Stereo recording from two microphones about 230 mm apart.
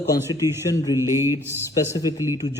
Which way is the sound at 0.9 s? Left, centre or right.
Centre.